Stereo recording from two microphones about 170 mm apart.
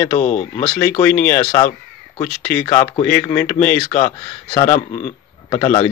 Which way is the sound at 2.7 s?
10° left (ahead or behind).